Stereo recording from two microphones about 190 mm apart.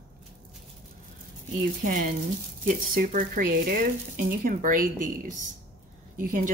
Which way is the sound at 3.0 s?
50° right (ahead or behind).